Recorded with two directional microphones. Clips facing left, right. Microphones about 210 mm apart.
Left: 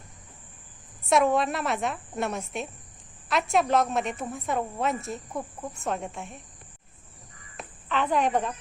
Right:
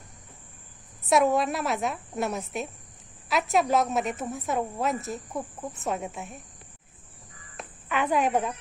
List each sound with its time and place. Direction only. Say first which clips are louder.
1.0 s a woman's voice: even; centre (ahead or behind)
7.9 s a woman's voice: even; 10° right (ahead or behind)